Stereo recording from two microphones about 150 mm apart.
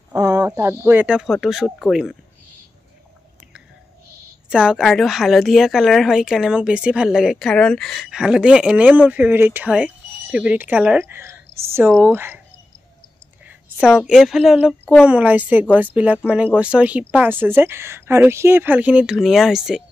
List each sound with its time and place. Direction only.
0.1 s a sound: 25° right (ahead or behind)
0.5 s speech: 15° right (ahead or behind)
4.5 s speech: 5° right (ahead or behind)
13.5 s speech: 5° right (ahead or behind)